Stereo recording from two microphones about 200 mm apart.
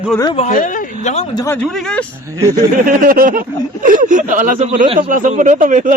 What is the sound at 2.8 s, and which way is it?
Speech, 45° right (ahead or behind).